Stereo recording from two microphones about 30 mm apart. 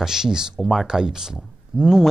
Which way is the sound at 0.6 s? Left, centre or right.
Centre.